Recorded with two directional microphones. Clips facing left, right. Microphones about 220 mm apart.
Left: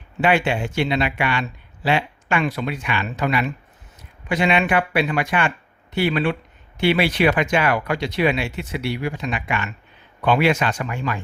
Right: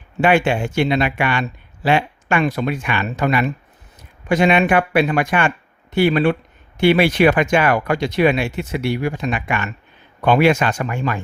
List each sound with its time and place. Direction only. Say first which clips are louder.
0.2 s speech: right 3 dB; 50° right (ahead or behind)